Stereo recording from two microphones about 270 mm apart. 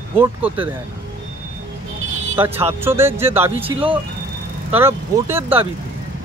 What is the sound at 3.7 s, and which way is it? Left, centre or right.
Speech, centre.